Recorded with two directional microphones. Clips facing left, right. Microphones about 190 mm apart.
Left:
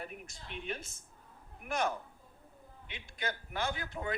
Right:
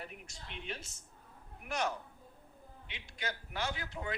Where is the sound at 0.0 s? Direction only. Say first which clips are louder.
Left 3 dB; 50° left (ahead or behind).